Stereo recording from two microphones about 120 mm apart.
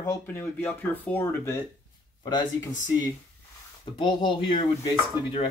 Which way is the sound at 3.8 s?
40° left (ahead or behind).